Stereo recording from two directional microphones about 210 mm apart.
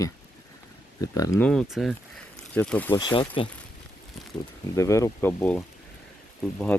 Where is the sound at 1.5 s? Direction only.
Centre (ahead or behind).